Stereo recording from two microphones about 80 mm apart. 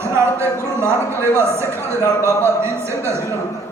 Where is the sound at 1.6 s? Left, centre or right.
Left.